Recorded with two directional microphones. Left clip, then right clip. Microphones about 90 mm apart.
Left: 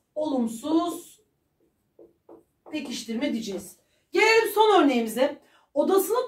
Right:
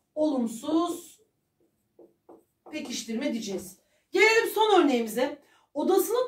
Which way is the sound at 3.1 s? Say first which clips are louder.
Left 3 dB; 30° right (ahead or behind).